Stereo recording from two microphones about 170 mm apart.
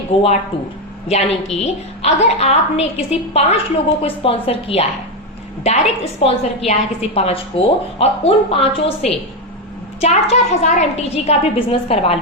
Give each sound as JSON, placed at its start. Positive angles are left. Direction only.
{"t": 0.1, "sound": "a woman's voice", "side_deg": 40}